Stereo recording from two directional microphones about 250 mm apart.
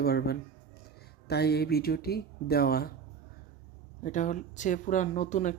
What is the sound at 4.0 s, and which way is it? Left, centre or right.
Speech, left.